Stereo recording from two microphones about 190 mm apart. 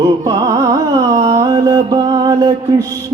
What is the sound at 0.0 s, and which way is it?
Carnatic music, 20° right (ahead or behind).